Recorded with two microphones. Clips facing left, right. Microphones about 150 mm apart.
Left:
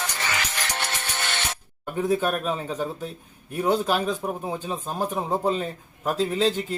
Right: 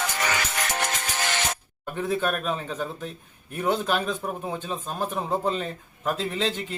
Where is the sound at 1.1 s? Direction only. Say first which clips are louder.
Right 2 dB; 70° left (ahead or behind).